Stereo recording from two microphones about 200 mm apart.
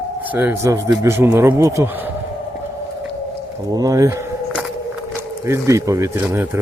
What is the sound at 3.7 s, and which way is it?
Speech, 15° right (ahead or behind).